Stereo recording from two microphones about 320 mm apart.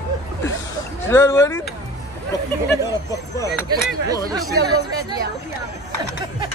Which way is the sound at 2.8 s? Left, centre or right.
Centre.